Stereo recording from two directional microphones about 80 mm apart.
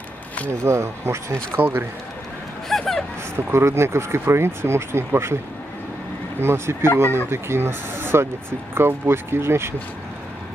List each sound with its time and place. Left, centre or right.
0.5 s speech: right
2.7 s a sound: centre
3.3 s speech: right
6.4 s speech: right